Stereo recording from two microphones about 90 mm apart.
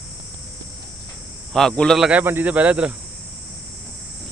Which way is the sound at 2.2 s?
20° right (ahead or behind).